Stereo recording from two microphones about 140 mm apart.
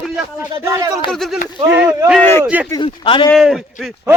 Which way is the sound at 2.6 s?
30° left (ahead or behind).